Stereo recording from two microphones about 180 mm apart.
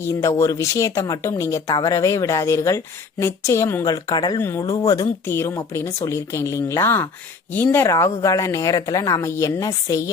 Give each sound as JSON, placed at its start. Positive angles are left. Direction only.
{"t": 0.0, "sound": "speech", "side_deg": 15}